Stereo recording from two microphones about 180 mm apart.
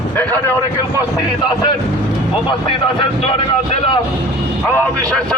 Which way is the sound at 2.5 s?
25° left (ahead or behind).